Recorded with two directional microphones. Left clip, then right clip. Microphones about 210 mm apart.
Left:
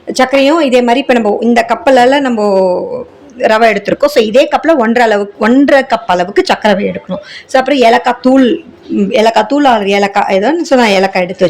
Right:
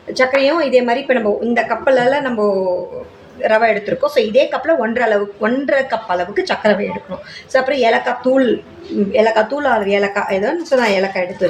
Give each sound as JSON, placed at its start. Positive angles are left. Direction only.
{"t": 0.1, "sound": "speech", "side_deg": 45}